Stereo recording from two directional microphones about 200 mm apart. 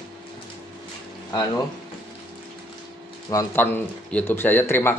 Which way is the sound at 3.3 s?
15° left (ahead or behind).